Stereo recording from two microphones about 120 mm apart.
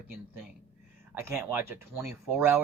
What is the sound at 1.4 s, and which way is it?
Speech, 20° right (ahead or behind).